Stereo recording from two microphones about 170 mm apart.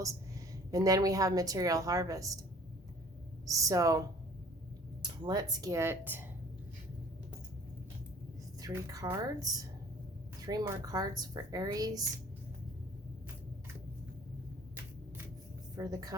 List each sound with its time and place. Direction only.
0.7 s a woman's voice: 20° right (ahead or behind)
3.4 s a woman's voice: 20° right (ahead or behind)
8.6 s a woman's voice: 20° right (ahead or behind)
15.7 s a woman's voice: 20° right (ahead or behind)